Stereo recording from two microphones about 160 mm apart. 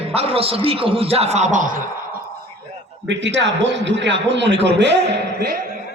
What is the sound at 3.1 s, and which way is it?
Speech, 90° right.